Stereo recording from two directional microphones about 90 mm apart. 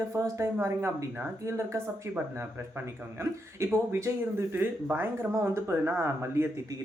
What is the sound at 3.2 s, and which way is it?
Speech, 30° right (ahead or behind).